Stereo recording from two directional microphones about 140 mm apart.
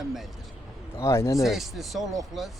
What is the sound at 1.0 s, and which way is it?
Speech, 20° left (ahead or behind).